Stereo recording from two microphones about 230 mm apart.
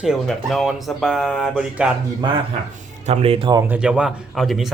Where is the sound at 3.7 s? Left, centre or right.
Centre.